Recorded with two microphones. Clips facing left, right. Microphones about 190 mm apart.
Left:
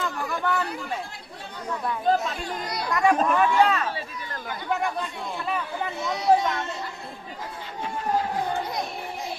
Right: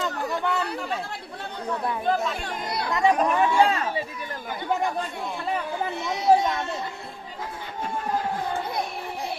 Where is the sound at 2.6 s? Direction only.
25° right (ahead or behind).